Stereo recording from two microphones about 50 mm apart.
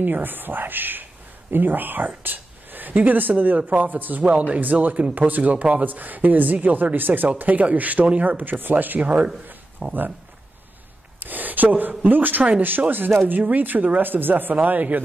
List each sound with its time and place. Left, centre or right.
0.0 s speech: right
11.1 s a sound: right
12.0 s speech: right